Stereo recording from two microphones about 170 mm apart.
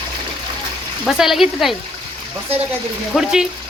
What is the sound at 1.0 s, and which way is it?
Speech, centre (ahead or behind).